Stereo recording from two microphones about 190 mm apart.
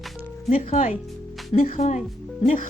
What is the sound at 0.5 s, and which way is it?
A woman's voice, 40° left (ahead or behind).